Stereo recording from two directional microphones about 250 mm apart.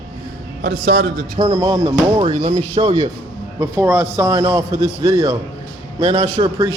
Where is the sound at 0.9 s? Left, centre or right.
Right.